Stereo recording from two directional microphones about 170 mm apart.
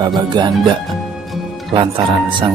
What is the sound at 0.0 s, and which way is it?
Speech, 25° right (ahead or behind).